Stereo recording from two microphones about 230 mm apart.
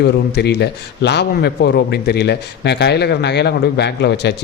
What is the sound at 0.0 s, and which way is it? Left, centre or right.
Speech, left.